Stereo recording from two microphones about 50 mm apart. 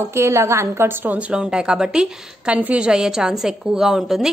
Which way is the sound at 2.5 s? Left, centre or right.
Right.